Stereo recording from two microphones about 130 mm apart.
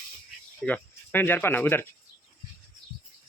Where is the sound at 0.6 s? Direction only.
15° left (ahead or behind).